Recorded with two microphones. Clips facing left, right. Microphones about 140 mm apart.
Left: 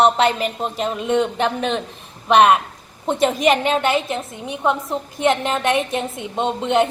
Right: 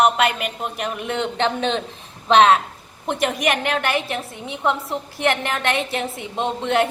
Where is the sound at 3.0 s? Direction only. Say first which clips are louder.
Left 4 dB; 25° left (ahead or behind).